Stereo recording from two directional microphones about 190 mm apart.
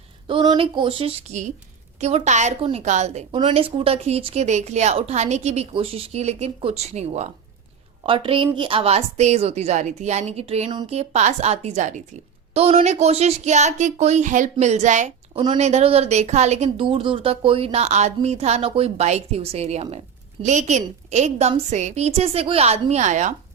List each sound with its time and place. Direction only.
0.3 s a woman's voice: 25° right (ahead or behind)
15.3 s a woman's voice: 25° right (ahead or behind)